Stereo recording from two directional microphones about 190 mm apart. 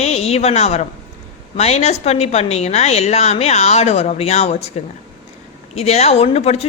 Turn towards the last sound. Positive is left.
turn(degrees=35)  # may be behind; listen again after turning